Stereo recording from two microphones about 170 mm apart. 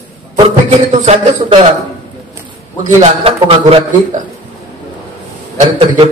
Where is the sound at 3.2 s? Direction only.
35° right (ahead or behind).